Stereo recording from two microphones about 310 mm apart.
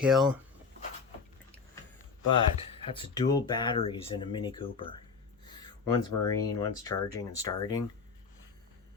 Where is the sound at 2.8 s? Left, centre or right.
Centre.